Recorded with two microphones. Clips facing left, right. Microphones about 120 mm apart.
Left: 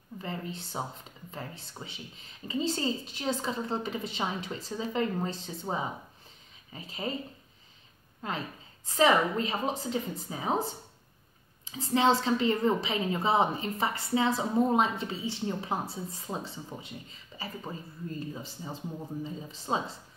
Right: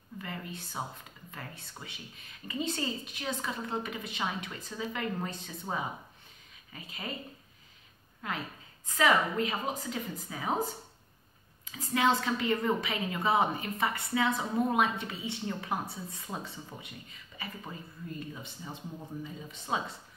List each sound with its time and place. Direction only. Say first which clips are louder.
0.2 s a woman's voice: left 4 dB; 30° left (ahead or behind)
8.2 s a woman's voice: left 2 dB; 30° left (ahead or behind)
11.9 s a woman's voice: left 3 dB; 30° left (ahead or behind)